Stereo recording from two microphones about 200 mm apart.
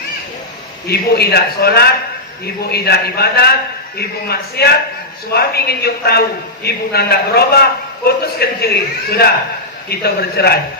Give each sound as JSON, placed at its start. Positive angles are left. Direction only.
{"t": 0.9, "sound": "a man's voice", "side_deg": 55}